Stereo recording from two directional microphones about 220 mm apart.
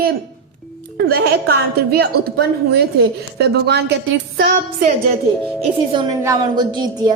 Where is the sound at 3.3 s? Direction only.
50° right (ahead or behind).